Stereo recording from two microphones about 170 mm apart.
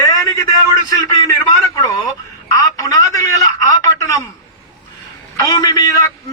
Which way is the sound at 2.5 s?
20° left (ahead or behind).